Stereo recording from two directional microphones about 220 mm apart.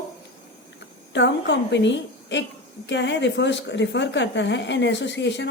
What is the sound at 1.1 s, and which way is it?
Speech, 55° left (ahead or behind).